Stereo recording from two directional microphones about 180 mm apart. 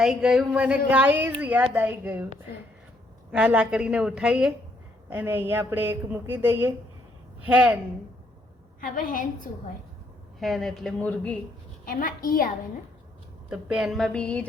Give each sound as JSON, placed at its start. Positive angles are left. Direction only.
{"t": 0.0, "sound": "a woman's voice", "side_deg": 0}
{"t": 3.3, "sound": "a woman's voice", "side_deg": -5}
{"t": 8.8, "sound": "a woman's voice", "side_deg": 50}
{"t": 10.4, "sound": "a woman's voice", "side_deg": 0}
{"t": 11.9, "sound": "a woman's voice", "side_deg": 50}
{"t": 13.5, "sound": "a woman's voice", "side_deg": -5}